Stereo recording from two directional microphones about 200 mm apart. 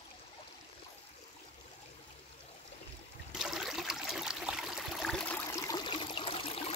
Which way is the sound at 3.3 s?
5° right (ahead or behind).